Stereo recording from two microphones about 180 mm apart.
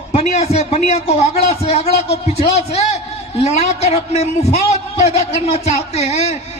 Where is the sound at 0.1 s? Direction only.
35° left (ahead or behind).